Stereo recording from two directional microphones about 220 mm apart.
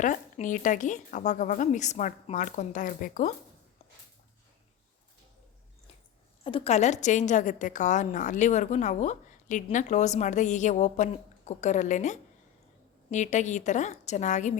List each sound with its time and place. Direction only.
0.0 s a woman's voice: 35° left (ahead or behind)
6.4 s a woman's voice: 25° left (ahead or behind)